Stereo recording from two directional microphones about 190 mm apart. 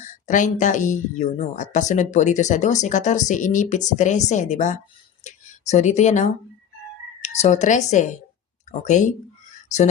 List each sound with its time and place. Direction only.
0.0 s a woman's voice: 40° left (ahead or behind)
9.6 s speech: 40° left (ahead or behind)